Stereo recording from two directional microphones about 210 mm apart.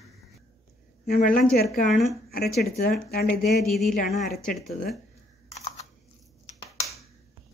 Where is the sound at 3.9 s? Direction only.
40° left (ahead or behind).